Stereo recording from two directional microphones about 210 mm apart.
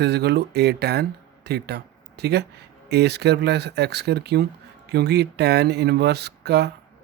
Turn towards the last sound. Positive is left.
turn(degrees=-50)  # may be behind; listen again after turning